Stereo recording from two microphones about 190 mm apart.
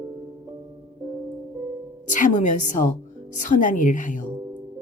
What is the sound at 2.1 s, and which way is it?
Speech, 40° left (ahead or behind).